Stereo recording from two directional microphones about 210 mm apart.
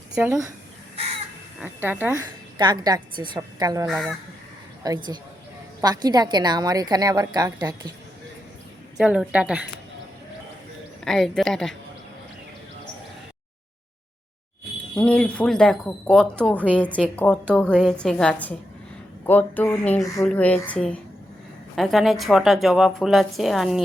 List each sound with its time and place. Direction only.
0.1 s speech: 10° right (ahead or behind)
1.6 s a woman's voice: 10° right (ahead or behind)
5.8 s a woman's voice: 20° right (ahead or behind)
9.0 s speech: 5° right (ahead or behind)
11.0 s speech: centre (ahead or behind)
14.9 s speech: 5° left (ahead or behind)